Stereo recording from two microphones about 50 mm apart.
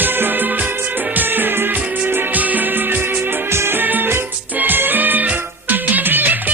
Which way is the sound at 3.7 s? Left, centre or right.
Right.